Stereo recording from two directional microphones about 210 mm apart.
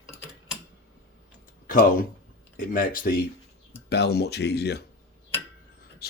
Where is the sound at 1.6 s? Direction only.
40° left (ahead or behind).